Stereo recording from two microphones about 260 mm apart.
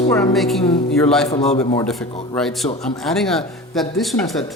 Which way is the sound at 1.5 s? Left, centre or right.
Left.